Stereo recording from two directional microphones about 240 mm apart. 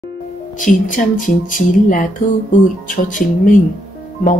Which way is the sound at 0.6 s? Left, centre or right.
Left.